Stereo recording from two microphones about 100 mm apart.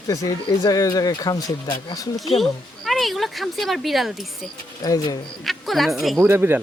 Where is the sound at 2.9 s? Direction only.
Centre (ahead or behind).